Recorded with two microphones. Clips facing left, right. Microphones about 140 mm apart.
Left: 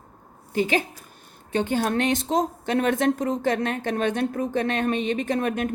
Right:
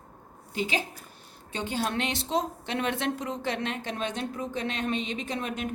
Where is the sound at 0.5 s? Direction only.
55° left (ahead or behind).